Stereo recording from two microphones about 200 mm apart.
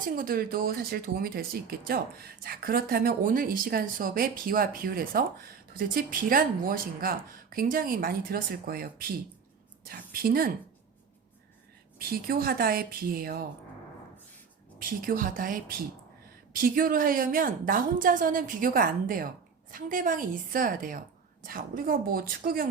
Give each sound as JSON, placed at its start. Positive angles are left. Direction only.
{"t": 0.0, "sound": "a woman's voice", "side_deg": -45}
{"t": 11.9, "sound": "speech", "side_deg": -50}
{"t": 14.8, "sound": "speech", "side_deg": -45}